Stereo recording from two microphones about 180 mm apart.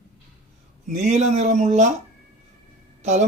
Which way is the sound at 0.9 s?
40° right (ahead or behind).